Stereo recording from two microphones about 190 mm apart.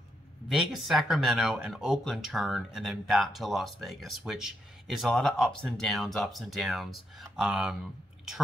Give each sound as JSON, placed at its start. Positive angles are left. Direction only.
{"t": 0.5, "sound": "speech", "side_deg": 0}